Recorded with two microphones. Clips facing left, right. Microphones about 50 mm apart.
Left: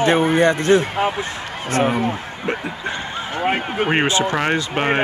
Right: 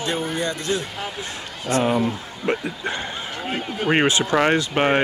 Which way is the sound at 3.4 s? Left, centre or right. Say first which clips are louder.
Left 8 dB; left.